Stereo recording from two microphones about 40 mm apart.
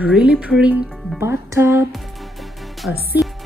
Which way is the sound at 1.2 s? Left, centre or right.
Right.